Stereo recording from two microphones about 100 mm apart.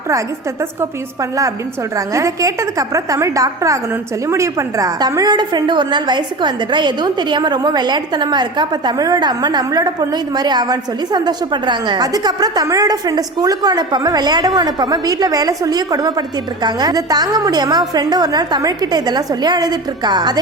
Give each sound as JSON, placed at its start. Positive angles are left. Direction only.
{"t": 0.8, "sound": "a woman's voice", "side_deg": -30}